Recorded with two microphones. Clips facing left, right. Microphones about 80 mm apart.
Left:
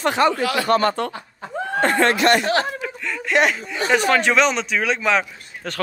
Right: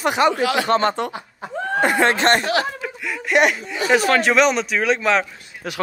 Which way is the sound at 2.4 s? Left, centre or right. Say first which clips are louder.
Even; left.